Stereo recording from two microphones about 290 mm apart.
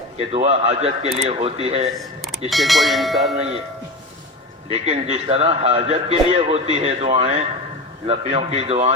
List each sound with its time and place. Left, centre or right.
0.3 s a man's voice: right
2.5 s speech: centre
4.7 s a man's voice: right